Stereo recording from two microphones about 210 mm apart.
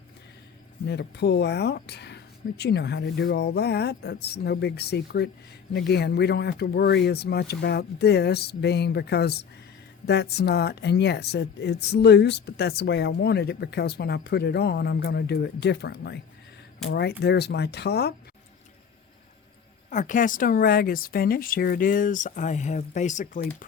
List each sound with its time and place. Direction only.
0.9 s speech: 55° left (ahead or behind)
19.9 s speech: 35° left (ahead or behind)